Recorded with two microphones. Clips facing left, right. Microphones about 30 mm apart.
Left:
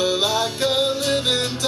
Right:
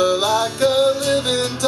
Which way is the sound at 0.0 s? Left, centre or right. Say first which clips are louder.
Right 3 dB; centre.